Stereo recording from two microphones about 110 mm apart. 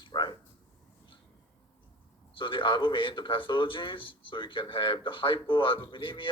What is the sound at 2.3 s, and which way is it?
Speech, 50° left (ahead or behind).